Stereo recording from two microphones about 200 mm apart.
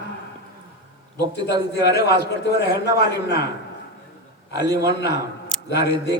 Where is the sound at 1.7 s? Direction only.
55° left (ahead or behind).